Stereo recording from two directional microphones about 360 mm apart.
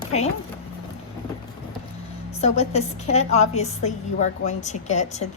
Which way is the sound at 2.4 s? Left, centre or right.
Centre.